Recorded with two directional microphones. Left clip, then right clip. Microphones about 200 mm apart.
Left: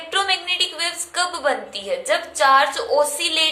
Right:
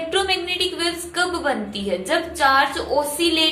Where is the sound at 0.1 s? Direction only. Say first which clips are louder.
Left 2 dB; 20° left (ahead or behind).